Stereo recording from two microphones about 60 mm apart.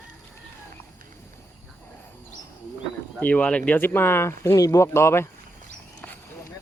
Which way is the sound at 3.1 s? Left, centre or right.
Left.